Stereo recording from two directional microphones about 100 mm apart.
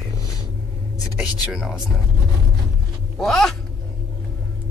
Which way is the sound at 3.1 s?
Centre (ahead or behind).